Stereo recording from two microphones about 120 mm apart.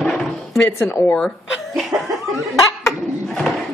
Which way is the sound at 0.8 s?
15° left (ahead or behind).